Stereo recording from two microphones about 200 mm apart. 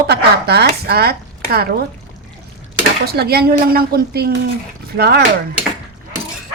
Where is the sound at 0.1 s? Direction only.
55° right (ahead or behind).